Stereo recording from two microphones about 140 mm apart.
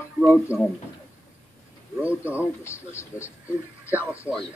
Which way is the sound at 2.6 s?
20° left (ahead or behind).